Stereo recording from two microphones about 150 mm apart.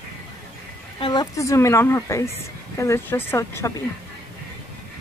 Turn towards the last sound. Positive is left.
turn(degrees=15)  # may be behind; listen again after turning